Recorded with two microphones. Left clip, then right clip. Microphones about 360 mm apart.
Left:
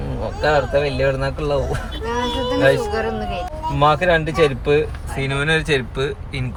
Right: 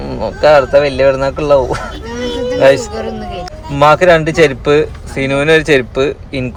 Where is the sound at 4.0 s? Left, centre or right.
Right.